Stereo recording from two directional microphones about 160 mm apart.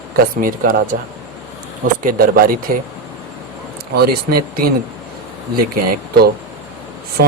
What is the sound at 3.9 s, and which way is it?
Speech, 75° right (ahead or behind).